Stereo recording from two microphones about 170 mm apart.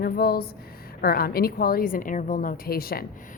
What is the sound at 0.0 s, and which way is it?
A woman's voice, 65° left (ahead or behind).